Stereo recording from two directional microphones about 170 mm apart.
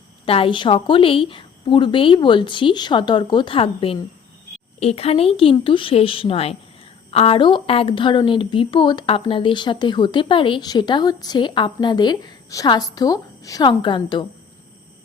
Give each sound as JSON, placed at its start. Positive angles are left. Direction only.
{"t": 0.3, "sound": "a woman's voice", "side_deg": 30}